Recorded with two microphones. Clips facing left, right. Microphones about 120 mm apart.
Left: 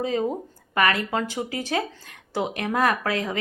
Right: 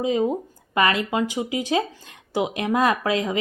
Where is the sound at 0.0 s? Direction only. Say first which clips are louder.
Right 3 dB; 15° right (ahead or behind).